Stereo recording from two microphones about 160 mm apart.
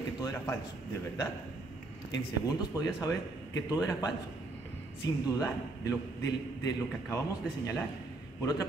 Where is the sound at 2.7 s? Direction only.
20° left (ahead or behind).